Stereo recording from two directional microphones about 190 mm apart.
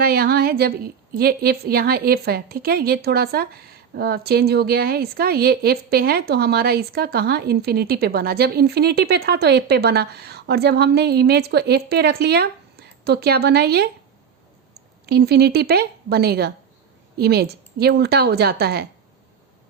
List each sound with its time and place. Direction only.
0.0 s a woman's voice: 50° right (ahead or behind)
15.0 s a woman's voice: 55° right (ahead or behind)